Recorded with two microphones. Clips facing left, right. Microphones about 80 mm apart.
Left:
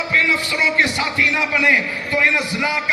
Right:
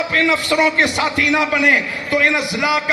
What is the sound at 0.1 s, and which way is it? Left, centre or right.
A man's voice, right.